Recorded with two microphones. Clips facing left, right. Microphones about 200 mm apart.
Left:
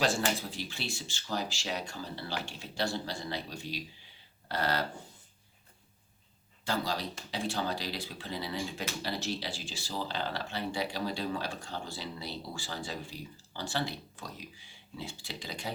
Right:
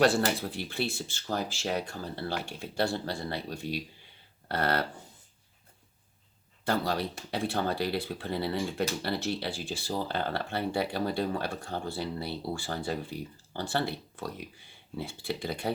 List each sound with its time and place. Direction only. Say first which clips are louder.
0.3 s speech: right 6 dB; 60° right (ahead or behind)
6.7 s speech: right 4 dB; 60° right (ahead or behind)